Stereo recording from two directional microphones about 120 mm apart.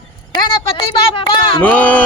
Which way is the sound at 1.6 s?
15° left (ahead or behind).